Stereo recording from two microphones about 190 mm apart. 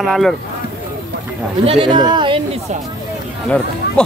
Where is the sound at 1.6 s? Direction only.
30° right (ahead or behind).